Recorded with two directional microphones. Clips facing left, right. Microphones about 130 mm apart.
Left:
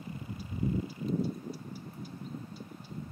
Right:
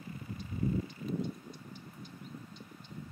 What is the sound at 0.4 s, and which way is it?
Vehicle, 5° left (ahead or behind).